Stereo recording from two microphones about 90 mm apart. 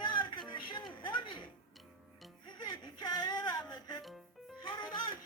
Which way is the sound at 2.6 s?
50° left (ahead or behind).